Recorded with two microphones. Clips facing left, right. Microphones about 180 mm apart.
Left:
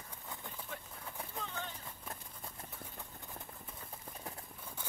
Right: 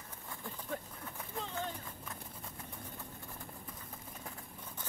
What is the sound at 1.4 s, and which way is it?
Clip-clop, 35° right (ahead or behind).